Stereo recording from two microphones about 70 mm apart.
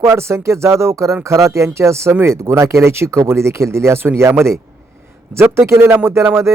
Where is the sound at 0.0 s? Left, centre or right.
Right.